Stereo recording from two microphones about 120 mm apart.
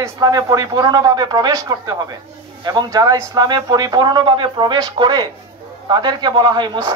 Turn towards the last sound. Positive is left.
turn(degrees=-35)  # may be behind; listen again after turning